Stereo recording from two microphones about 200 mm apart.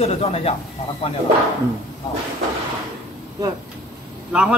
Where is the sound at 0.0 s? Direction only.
30° left (ahead or behind).